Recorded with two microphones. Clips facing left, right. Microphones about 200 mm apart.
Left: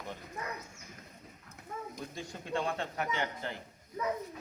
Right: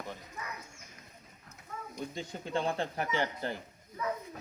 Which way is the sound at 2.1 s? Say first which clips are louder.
Right 1 dB; 20° right (ahead or behind).